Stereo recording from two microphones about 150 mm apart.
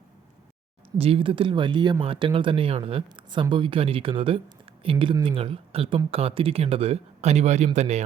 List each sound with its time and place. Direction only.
0.9 s speech: 40° right (ahead or behind)